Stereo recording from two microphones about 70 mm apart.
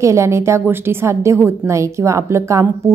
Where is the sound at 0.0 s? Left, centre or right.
Right.